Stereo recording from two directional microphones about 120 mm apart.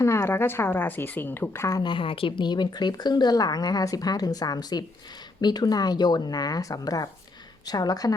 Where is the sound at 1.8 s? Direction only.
45° left (ahead or behind).